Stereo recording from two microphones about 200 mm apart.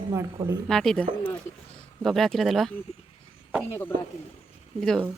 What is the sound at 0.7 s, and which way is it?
Speech, centre (ahead or behind).